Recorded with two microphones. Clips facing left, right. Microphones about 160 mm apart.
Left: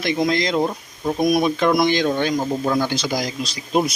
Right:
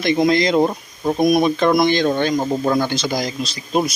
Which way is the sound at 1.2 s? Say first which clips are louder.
Right 2 dB; centre (ahead or behind).